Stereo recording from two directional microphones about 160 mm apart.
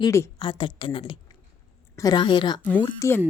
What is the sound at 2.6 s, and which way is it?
Speech, 10° left (ahead or behind).